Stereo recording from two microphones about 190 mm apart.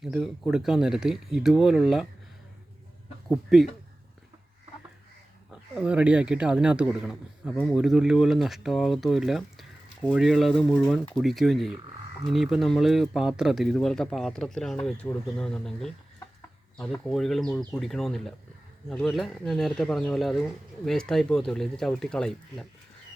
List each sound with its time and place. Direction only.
0.0 s speech: centre (ahead or behind)
3.2 s speech: centre (ahead or behind)
5.5 s speech: 5° right (ahead or behind)